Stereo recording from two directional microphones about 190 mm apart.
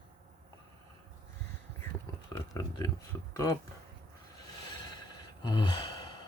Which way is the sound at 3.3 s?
15° left (ahead or behind).